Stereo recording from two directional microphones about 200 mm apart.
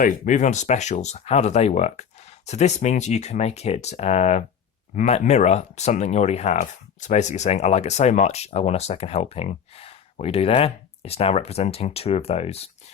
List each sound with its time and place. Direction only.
0.0 s speech: 40° left (ahead or behind)